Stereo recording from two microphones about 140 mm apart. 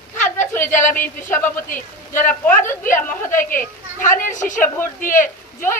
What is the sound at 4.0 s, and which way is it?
A woman's voice, 70° left (ahead or behind).